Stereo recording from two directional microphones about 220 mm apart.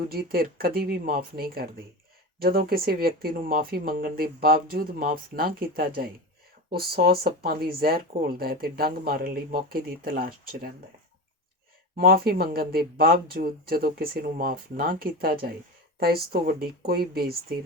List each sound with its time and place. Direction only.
0.1 s speech: 45° right (ahead or behind)
11.9 s speech: 45° right (ahead or behind)